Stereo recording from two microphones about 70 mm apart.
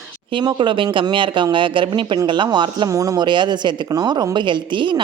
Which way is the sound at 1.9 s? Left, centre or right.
Right.